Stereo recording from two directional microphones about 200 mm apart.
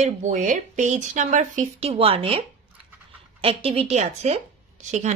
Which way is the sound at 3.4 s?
30° right (ahead or behind).